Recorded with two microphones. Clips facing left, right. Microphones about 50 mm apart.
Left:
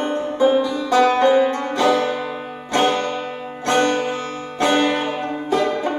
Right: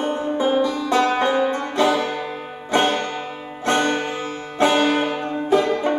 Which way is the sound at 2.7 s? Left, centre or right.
Centre.